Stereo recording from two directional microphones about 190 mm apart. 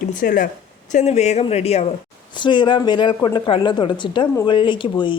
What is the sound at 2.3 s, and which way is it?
Speech, 25° left (ahead or behind).